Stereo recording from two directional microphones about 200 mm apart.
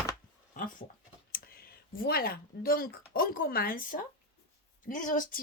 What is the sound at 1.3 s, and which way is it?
A woman's voice, 50° left (ahead or behind).